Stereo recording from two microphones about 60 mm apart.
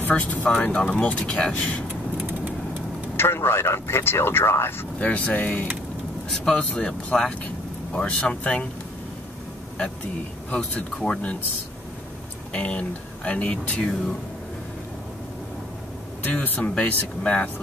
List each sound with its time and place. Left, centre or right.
0.5 s speech: centre
3.2 s speech: left
5.0 s speech: left
6.3 s speech: centre
10.5 s speech: centre
12.5 s speech: left
16.3 s speech: left